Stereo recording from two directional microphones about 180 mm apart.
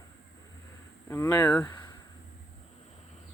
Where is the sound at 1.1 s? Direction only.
15° left (ahead or behind).